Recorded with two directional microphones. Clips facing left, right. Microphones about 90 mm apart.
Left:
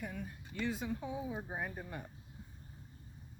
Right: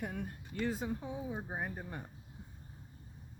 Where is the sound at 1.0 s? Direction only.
20° right (ahead or behind).